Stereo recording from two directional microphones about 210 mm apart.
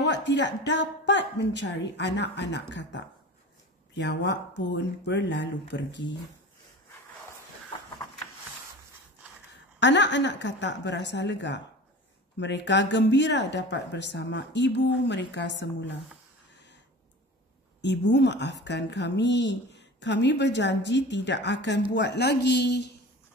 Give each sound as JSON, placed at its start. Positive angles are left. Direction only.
{"t": 0.0, "sound": "speech", "side_deg": 55}
{"t": 9.8, "sound": "speech", "side_deg": 55}
{"t": 17.8, "sound": "speech", "side_deg": 55}